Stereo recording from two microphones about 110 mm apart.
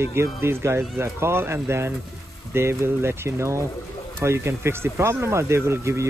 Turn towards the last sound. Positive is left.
turn(degrees=-25)  # may be behind; listen again after turning